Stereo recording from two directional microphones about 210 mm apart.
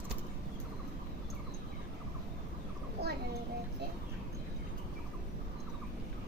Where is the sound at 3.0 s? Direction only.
50° right (ahead or behind).